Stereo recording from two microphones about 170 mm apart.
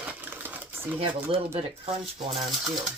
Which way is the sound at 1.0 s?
35° right (ahead or behind).